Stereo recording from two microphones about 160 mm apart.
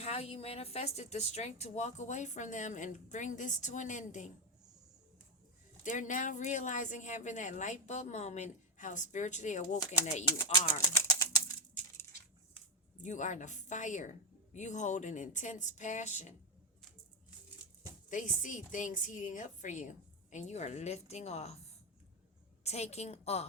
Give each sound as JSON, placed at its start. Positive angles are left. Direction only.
{"t": 0.0, "sound": "a woman's voice", "side_deg": 40}
{"t": 5.8, "sound": "a woman's voice", "side_deg": 50}
{"t": 10.3, "sound": "speech", "side_deg": 25}
{"t": 10.9, "sound": "bird", "side_deg": 20}
{"t": 13.0, "sound": "a woman's voice", "side_deg": 50}
{"t": 18.1, "sound": "a woman's voice", "side_deg": 55}
{"t": 22.6, "sound": "a woman's voice", "side_deg": 40}